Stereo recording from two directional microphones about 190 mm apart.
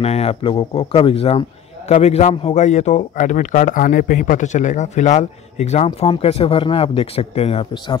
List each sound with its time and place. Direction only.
0.0 s a man's voice: 30° left (ahead or behind)